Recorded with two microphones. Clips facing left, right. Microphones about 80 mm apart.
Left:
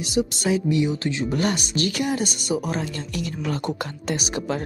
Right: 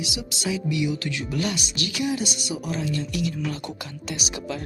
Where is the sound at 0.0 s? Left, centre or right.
Left.